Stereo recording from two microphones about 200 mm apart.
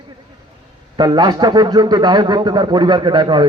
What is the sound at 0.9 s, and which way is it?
A man's voice, 20° right (ahead or behind).